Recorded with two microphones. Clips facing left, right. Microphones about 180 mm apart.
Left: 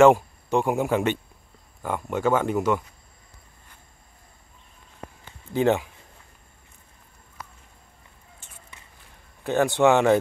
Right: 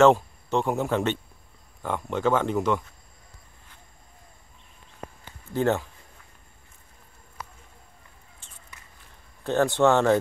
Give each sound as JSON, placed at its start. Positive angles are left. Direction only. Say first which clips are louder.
{"t": 0.0, "sound": "speech", "louder": "left 2 dB", "side_deg": 10}
{"t": 5.5, "sound": "speech", "louder": "left 3 dB", "side_deg": 15}
{"t": 9.4, "sound": "speech", "louder": "left 1 dB", "side_deg": 10}